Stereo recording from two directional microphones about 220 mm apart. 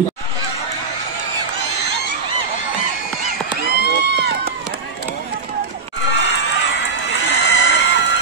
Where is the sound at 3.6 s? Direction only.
45° left (ahead or behind).